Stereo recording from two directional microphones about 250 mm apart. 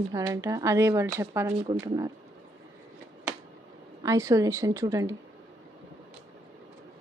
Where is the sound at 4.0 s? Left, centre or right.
Centre.